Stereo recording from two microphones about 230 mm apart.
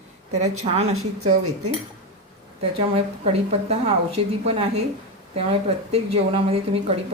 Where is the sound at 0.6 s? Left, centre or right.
Right.